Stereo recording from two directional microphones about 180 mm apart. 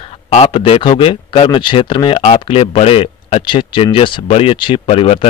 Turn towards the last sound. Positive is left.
turn(degrees=30)  # may be behind; listen again after turning